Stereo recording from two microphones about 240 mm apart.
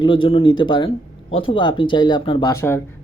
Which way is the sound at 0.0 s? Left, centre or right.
Left.